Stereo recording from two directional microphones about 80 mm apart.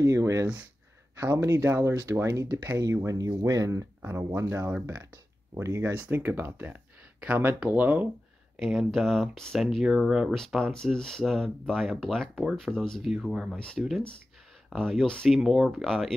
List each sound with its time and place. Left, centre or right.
0.0 s speech: right
5.9 s speech: right
8.5 s speech: centre
10.3 s speech: centre